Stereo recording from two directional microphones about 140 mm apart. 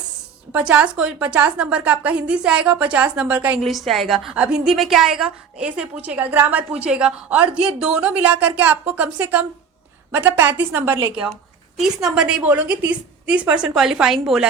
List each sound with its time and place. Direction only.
0.5 s a woman's voice: 10° right (ahead or behind)
3.6 s a woman's voice: centre (ahead or behind); by 11.1 s 15° right (ahead or behind)
11.8 s a woman's voice: 5° right (ahead or behind)